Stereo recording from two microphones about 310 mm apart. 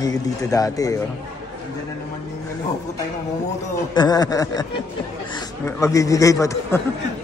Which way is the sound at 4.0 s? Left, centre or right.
Centre.